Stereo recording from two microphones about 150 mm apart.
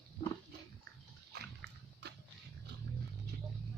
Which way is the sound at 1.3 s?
90° right.